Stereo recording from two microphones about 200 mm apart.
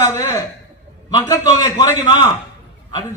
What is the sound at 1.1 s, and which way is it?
A man's voice, 20° left (ahead or behind).